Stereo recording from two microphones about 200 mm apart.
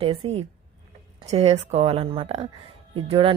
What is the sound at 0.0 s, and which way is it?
A woman's voice, 25° right (ahead or behind).